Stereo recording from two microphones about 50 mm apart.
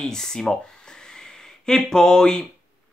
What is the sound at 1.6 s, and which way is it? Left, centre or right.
Speech, centre.